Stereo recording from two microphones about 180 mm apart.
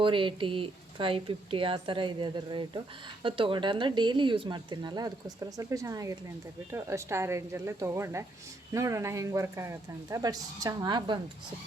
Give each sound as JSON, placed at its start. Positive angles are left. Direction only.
{"t": 0.0, "sound": "speech", "side_deg": -30}